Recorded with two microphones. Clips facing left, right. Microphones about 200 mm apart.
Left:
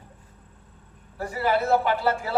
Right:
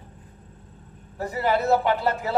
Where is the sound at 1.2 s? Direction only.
20° right (ahead or behind).